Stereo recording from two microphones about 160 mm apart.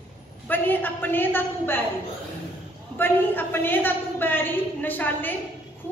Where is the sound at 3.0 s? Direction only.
15° left (ahead or behind).